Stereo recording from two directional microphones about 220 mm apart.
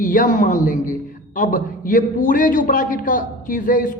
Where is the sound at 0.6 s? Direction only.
35° left (ahead or behind).